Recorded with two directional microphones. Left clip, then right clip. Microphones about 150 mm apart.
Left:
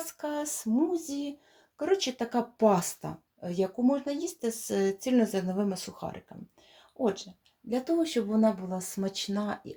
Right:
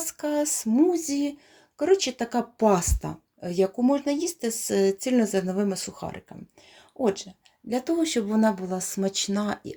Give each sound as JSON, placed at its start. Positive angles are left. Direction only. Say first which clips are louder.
{"t": 0.0, "sound": "a sound", "louder": "right 7 dB", "side_deg": -35}
{"t": 0.9, "sound": "speech", "louder": "right 8 dB", "side_deg": -60}
{"t": 1.8, "sound": "speech", "louder": "right 6 dB", "side_deg": -30}
{"t": 7.0, "sound": "speech", "louder": "right 4 dB", "side_deg": -40}